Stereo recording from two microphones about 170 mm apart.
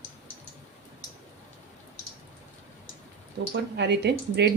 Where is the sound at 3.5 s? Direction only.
85° right.